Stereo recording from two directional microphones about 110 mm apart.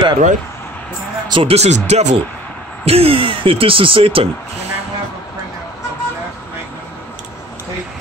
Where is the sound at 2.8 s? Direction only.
65° right (ahead or behind).